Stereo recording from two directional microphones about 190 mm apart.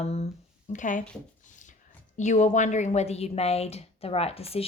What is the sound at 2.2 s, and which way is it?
Speech, 40° left (ahead or behind).